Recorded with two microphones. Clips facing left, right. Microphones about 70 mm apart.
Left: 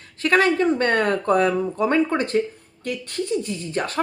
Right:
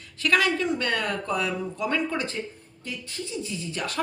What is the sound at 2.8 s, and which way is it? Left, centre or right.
Speech, left.